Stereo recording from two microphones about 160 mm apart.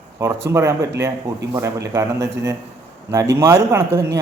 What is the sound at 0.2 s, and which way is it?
A man's voice, 20° right (ahead or behind).